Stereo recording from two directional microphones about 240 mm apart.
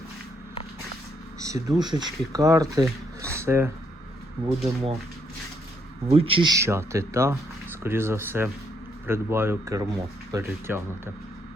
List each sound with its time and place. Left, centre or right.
1.4 s speech: centre
4.4 s speech: right
6.1 s speech: right